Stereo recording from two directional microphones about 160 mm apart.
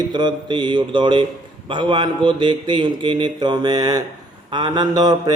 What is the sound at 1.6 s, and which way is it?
Mantra, 30° right (ahead or behind).